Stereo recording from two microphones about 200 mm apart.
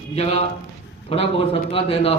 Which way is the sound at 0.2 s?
30° left (ahead or behind).